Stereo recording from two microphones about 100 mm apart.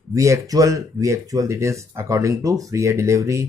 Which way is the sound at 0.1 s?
35° right (ahead or behind).